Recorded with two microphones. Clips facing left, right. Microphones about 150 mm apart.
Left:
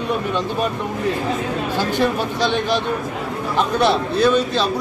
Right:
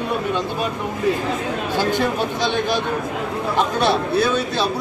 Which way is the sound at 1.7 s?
15° right (ahead or behind).